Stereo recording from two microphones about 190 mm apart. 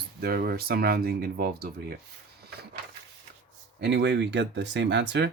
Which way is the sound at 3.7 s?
65° right (ahead or behind).